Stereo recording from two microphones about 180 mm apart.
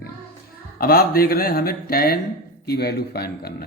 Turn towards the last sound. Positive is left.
turn(degrees=60)  # may be behind; listen again after turning